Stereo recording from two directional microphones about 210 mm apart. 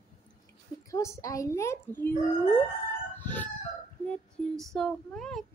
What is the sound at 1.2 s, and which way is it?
Speech, 15° left (ahead or behind).